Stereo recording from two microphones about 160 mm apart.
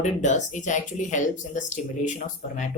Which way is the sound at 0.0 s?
50° left (ahead or behind).